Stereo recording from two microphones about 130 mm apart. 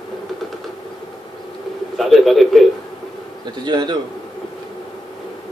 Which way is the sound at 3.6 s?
35° right (ahead or behind).